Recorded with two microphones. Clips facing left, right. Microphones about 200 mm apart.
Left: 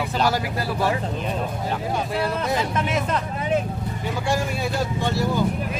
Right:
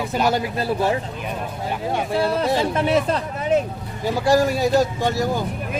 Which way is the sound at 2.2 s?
30° right (ahead or behind).